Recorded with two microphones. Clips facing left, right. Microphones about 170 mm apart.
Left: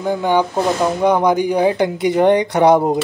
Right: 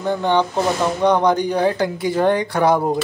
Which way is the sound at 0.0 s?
10° left (ahead or behind).